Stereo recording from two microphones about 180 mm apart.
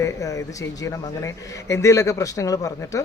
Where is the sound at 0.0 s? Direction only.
15° left (ahead or behind).